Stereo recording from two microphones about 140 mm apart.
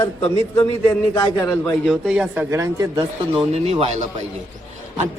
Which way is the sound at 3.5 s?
50° right (ahead or behind).